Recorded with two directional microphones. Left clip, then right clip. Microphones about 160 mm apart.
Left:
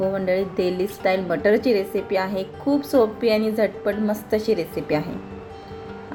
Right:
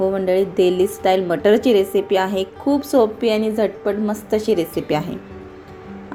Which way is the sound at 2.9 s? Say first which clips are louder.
Right 2 dB; 20° right (ahead or behind).